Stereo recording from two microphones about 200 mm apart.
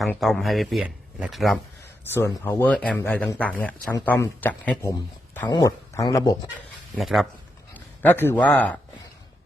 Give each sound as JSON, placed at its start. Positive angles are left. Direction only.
{"t": 0.0, "sound": "speech", "side_deg": 0}
{"t": 2.1, "sound": "speech", "side_deg": 10}
{"t": 6.9, "sound": "speech", "side_deg": 0}